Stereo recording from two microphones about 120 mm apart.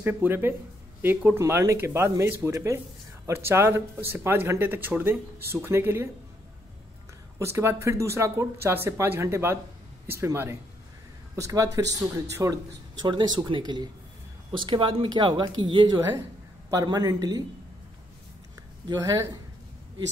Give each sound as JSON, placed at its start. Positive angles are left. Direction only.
{"t": 0.0, "sound": "speech", "side_deg": -15}
{"t": 7.3, "sound": "speech", "side_deg": -20}
{"t": 13.0, "sound": "speech", "side_deg": -35}
{"t": 16.0, "sound": "speech", "side_deg": -25}
{"t": 18.9, "sound": "speech", "side_deg": -30}